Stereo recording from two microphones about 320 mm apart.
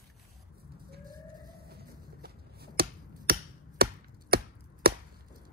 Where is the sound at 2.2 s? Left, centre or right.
Right.